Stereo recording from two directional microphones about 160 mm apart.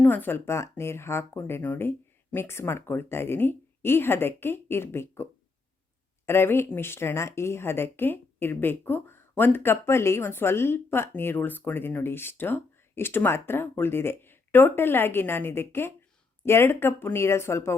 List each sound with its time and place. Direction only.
0.0 s speech: 10° left (ahead or behind)